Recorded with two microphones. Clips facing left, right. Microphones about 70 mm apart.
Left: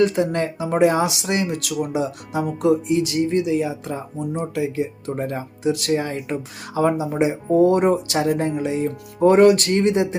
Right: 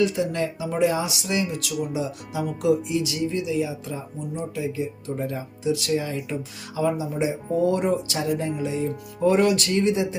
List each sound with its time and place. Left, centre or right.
0.0 s speech: left
4.4 s speech: left